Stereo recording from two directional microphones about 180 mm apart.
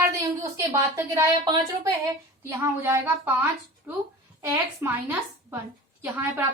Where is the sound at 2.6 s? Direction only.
10° right (ahead or behind).